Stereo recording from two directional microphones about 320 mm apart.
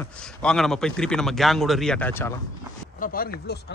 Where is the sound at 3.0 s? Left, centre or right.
Left.